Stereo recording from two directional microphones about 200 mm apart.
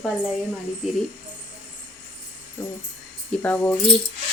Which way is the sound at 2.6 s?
10° left (ahead or behind).